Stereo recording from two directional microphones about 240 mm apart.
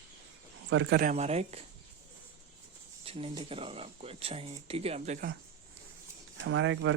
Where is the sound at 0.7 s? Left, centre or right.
Right.